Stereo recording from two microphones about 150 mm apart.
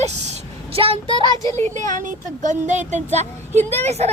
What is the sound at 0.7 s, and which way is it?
Speech, 40° right (ahead or behind).